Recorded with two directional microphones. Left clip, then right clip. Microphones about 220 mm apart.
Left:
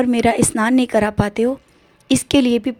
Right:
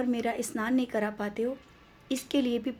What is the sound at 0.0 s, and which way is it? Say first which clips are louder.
A woman's voice: left 14 dB; 40° left (ahead or behind).